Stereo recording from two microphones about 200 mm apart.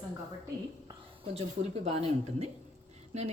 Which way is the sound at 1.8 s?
30° right (ahead or behind).